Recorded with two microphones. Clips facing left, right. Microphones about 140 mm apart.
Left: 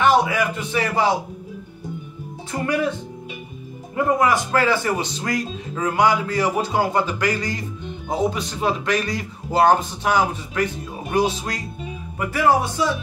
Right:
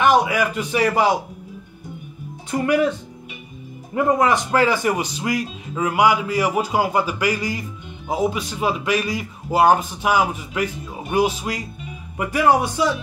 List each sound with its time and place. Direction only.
0.0 s a man's voice: 15° right (ahead or behind)
2.6 s music: 20° right (ahead or behind)
3.9 s speech: 20° right (ahead or behind)
12.2 s music: 20° right (ahead or behind)